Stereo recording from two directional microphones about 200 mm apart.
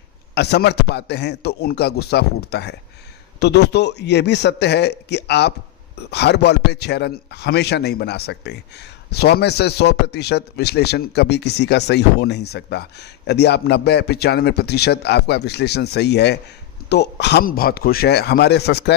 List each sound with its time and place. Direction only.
0.3 s a man's voice: 55° left (ahead or behind)